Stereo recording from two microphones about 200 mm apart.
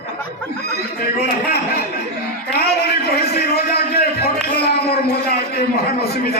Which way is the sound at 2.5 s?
55° left (ahead or behind).